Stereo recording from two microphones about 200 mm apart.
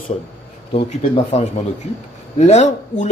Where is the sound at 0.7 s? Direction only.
30° left (ahead or behind).